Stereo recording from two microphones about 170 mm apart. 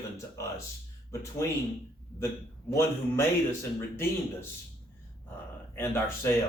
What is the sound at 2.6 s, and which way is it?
A man's voice, 15° left (ahead or behind).